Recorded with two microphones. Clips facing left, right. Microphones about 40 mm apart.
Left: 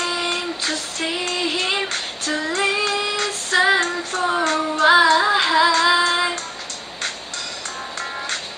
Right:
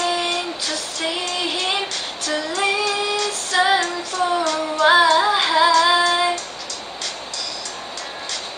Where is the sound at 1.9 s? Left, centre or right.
Left.